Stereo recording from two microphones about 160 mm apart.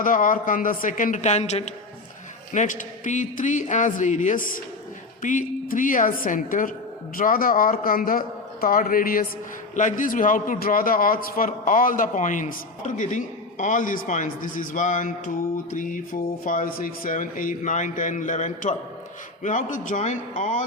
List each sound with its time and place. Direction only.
0.0 s a man's voice: 55° left (ahead or behind)